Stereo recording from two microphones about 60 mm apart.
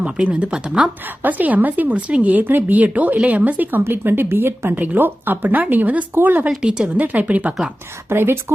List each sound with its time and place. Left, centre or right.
0.3 s speech: right
1.2 s a woman's voice: right
4.7 s a woman's voice: right
6.6 s speech: centre
8.1 s a woman's voice: right